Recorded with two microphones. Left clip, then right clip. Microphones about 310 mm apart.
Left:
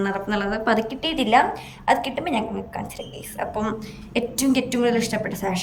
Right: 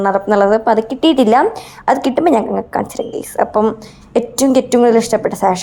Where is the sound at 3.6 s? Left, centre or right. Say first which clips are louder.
Right 12 dB; centre.